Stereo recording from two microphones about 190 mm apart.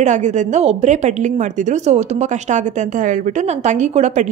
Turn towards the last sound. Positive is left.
turn(degrees=-40)  # may be behind; listen again after turning